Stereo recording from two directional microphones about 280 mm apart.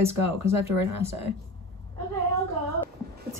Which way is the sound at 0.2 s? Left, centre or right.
Right.